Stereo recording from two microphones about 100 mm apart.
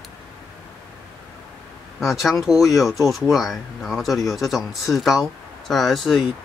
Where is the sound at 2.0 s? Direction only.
Centre (ahead or behind).